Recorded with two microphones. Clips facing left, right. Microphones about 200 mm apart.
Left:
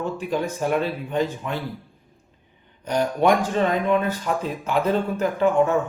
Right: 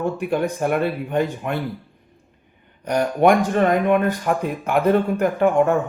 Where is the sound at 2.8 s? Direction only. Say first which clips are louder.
Right 3 dB; 65° right (ahead or behind).